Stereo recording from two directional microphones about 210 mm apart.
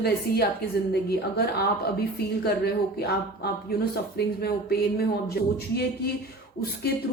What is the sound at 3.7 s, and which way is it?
Speech, 45° left (ahead or behind).